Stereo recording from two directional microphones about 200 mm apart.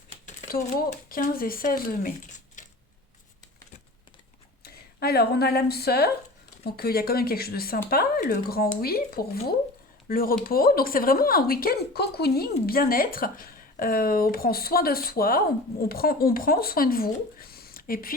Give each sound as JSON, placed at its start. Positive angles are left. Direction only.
{"t": 0.5, "sound": "a woman's voice", "side_deg": 45}
{"t": 4.6, "sound": "a woman's voice", "side_deg": 50}